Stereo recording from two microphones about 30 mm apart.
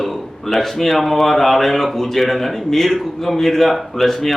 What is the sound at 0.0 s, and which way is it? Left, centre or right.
Speech, centre.